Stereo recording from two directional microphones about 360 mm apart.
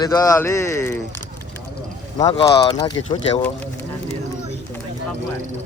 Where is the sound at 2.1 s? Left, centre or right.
Centre.